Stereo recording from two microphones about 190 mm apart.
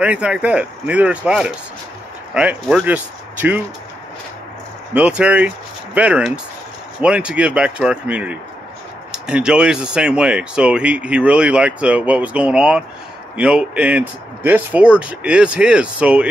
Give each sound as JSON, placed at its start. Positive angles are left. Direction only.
{"t": 0.0, "sound": "speech", "side_deg": -5}
{"t": 4.9, "sound": "speech", "side_deg": -5}